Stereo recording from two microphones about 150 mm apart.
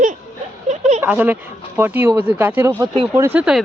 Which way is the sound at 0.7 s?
50° right (ahead or behind).